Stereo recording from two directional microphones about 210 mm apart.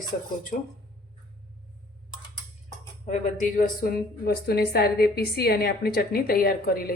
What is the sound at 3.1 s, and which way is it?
A woman's voice, 35° left (ahead or behind).